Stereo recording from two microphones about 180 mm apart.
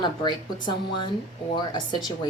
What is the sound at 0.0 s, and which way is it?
A woman's voice, 25° left (ahead or behind).